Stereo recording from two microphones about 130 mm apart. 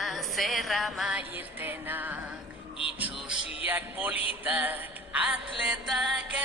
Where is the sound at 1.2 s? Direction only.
15° right (ahead or behind).